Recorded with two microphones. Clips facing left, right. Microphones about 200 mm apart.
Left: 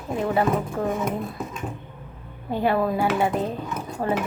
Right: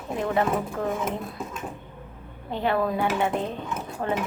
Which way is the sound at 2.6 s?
10° left (ahead or behind).